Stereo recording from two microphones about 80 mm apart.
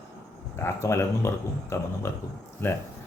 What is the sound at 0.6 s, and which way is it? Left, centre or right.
A man's voice, left.